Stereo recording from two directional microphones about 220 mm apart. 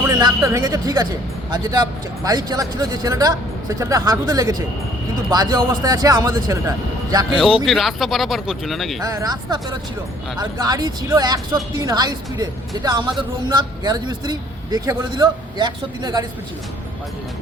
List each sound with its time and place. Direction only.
0.2 s speech: 15° right (ahead or behind)
7.3 s speech: centre (ahead or behind)
9.0 s speech: 15° right (ahead or behind)